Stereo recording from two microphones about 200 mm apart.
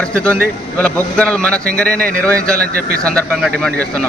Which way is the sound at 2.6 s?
45° right (ahead or behind).